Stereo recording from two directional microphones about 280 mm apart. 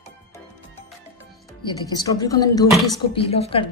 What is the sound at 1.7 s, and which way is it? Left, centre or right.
A woman's voice, centre.